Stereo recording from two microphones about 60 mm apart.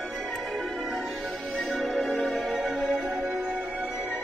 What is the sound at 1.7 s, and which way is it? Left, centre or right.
Music, centre.